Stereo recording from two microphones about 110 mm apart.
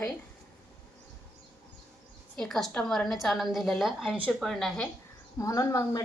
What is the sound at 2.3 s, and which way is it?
A woman's voice, 5° left (ahead or behind).